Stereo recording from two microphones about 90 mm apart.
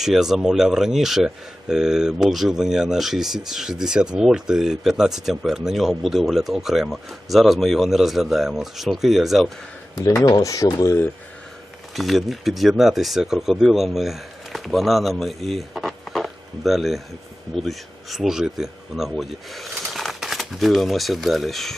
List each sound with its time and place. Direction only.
0.0 s speech: 5° right (ahead or behind)
10.2 s speech: 45° left (ahead or behind)
11.9 s speech: centre (ahead or behind)